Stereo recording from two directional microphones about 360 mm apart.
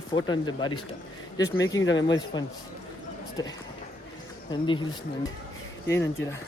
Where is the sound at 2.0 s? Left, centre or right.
Centre.